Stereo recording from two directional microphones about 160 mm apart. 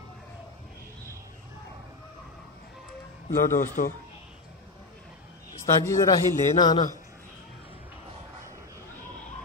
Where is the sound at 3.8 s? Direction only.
55° left (ahead or behind).